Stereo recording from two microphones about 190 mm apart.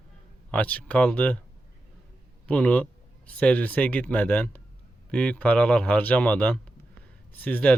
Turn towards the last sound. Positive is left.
turn(degrees=10)  # may be behind; listen again after turning